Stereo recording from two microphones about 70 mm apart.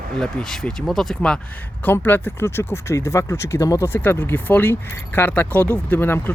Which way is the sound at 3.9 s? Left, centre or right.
Left.